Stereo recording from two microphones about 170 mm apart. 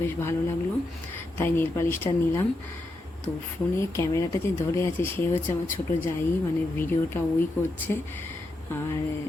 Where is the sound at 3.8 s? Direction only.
15° left (ahead or behind).